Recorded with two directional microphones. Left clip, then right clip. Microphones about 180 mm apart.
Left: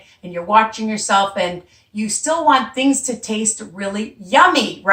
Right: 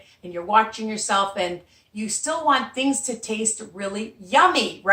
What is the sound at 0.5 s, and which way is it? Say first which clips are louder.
Speech: left 5 dB; 15° right (ahead or behind).